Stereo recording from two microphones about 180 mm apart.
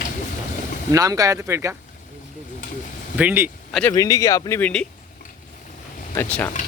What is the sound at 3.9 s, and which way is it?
Speech, 20° left (ahead or behind).